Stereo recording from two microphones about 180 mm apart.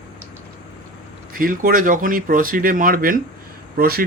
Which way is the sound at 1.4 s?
50° right (ahead or behind).